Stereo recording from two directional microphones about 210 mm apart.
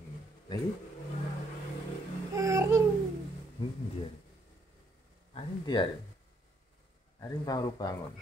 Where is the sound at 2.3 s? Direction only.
15° right (ahead or behind).